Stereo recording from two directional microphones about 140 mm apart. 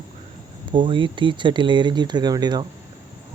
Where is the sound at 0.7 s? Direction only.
35° right (ahead or behind).